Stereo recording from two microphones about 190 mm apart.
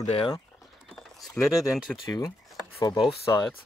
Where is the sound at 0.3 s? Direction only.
Centre (ahead or behind).